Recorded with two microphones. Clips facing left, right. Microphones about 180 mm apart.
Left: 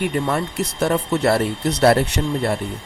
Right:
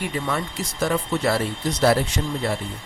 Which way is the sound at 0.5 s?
65° left (ahead or behind).